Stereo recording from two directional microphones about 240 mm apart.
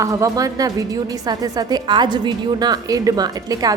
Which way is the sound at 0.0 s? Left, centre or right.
Centre.